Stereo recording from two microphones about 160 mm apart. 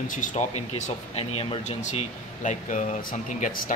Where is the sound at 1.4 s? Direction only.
35° left (ahead or behind).